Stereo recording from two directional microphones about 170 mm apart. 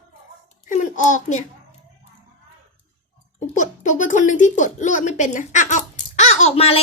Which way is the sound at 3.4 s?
45° left (ahead or behind).